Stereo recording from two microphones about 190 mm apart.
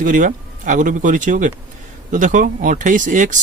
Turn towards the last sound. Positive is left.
turn(degrees=-40)  # may be behind; listen again after turning